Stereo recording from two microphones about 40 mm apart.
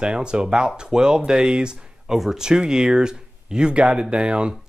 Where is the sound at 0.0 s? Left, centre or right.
Right.